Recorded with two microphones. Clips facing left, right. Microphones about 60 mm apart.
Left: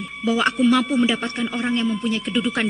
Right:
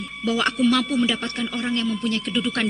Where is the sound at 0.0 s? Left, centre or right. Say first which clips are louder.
Left 2 dB; centre.